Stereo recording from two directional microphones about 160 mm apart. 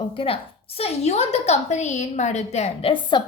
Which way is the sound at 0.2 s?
35° left (ahead or behind).